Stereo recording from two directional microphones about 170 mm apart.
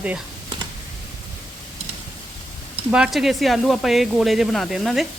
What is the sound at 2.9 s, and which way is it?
Speech, 5° right (ahead or behind).